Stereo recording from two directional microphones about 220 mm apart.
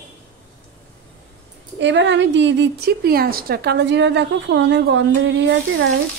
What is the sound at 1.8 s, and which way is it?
A woman's voice, 55° right (ahead or behind).